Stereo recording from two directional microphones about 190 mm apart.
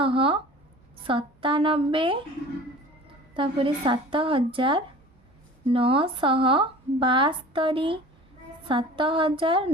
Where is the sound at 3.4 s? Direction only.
25° right (ahead or behind).